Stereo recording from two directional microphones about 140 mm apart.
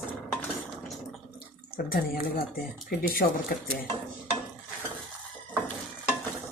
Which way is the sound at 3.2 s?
90° left.